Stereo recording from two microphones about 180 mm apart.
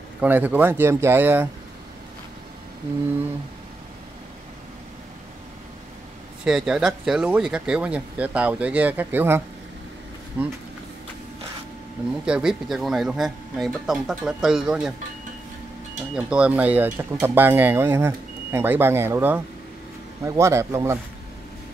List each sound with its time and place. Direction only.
0.2 s speech: 10° right (ahead or behind)
6.4 s speech: 5° right (ahead or behind)
12.3 s speech: 5° right (ahead or behind)
16.2 s speech: 5° right (ahead or behind)